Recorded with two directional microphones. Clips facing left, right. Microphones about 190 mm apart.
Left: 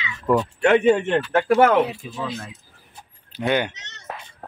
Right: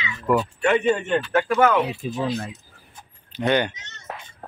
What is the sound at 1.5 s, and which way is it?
Speech, 60° left (ahead or behind).